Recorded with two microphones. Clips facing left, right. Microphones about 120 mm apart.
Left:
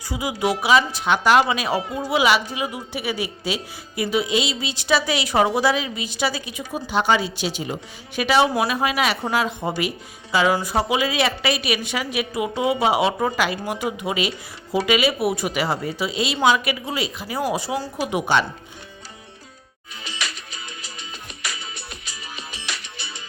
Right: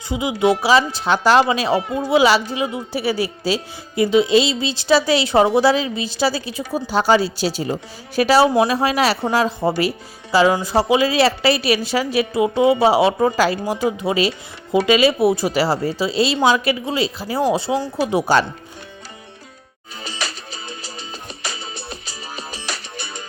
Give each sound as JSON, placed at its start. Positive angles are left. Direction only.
{"t": 0.1, "sound": "a woman's voice", "side_deg": -20}
{"t": 20.1, "sound": "music", "side_deg": -35}